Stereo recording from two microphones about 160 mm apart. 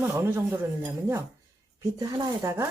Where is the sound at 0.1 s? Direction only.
15° right (ahead or behind).